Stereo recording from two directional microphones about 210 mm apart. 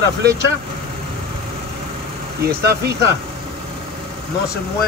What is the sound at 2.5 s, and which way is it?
Speech, 50° right (ahead or behind).